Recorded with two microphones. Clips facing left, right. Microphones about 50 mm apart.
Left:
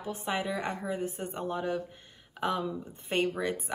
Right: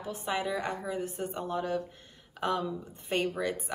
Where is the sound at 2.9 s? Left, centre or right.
Left.